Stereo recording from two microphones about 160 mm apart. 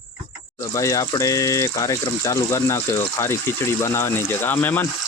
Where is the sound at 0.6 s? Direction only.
20° left (ahead or behind).